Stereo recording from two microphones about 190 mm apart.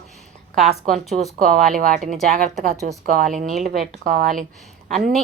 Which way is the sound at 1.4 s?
45° right (ahead or behind).